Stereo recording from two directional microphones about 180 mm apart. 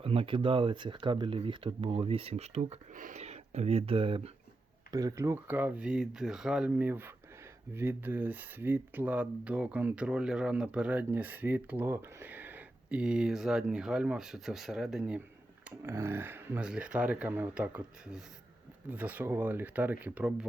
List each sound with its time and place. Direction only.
0.0 s speech: 30° right (ahead or behind)
4.9 s speech: 20° right (ahead or behind)